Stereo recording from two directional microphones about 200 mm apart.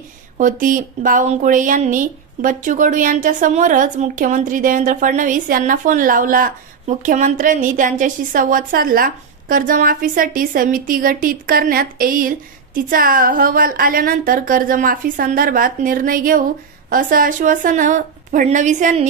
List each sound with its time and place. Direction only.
0.4 s a woman's voice: 40° right (ahead or behind)